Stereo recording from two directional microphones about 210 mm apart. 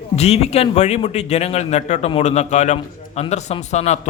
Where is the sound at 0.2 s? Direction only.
30° left (ahead or behind).